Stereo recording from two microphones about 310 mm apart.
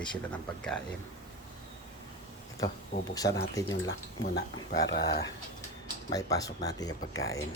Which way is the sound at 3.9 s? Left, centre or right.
Left.